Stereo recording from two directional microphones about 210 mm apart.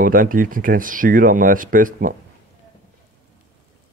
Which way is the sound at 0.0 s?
40° right (ahead or behind).